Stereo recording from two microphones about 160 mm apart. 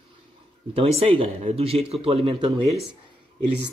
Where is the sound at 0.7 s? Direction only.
40° right (ahead or behind).